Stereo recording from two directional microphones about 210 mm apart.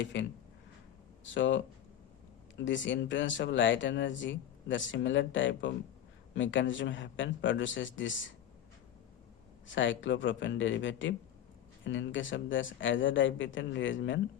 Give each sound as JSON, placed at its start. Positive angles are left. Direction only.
{"t": 0.0, "sound": "speech", "side_deg": 60}
{"t": 2.6, "sound": "speech", "side_deg": 60}
{"t": 9.6, "sound": "speech", "side_deg": 65}